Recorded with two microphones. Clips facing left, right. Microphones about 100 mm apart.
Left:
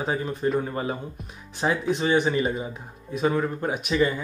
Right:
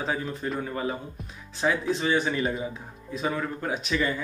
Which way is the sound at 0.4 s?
30° left (ahead or behind).